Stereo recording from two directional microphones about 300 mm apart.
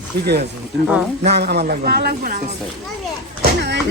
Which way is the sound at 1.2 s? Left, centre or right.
Right.